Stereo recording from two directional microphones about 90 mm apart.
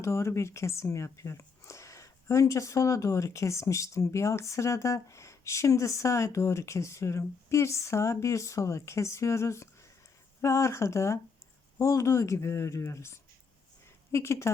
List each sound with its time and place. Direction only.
0.0 s speech: 30° left (ahead or behind)